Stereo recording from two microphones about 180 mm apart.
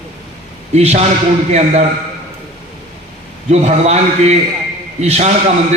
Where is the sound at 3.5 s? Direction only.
40° right (ahead or behind).